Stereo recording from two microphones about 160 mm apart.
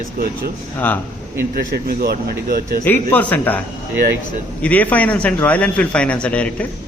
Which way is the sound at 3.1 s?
10° left (ahead or behind).